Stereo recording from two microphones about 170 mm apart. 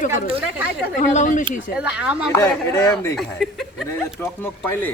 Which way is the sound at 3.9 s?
15° left (ahead or behind).